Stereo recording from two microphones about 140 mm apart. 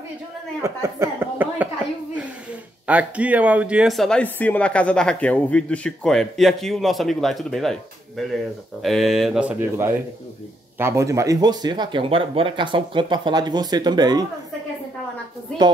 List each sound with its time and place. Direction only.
0.6 s speech: 20° right (ahead or behind)
2.9 s speech: 10° right (ahead or behind)
8.8 s speech: centre (ahead or behind); by 14.2 s 30° right (ahead or behind)